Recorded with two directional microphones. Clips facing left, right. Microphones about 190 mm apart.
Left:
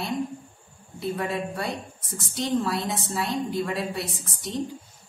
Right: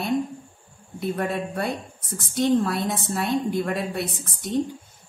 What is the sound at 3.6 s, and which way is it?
Speech, 55° right (ahead or behind).